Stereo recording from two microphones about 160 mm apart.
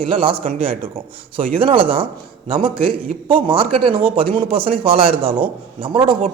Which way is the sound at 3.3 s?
30° right (ahead or behind).